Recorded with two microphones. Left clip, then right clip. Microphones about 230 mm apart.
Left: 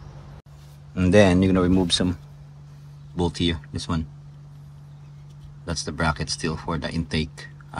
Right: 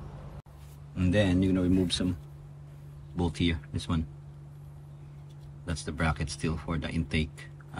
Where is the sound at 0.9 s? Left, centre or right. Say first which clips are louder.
Left 10 dB; centre.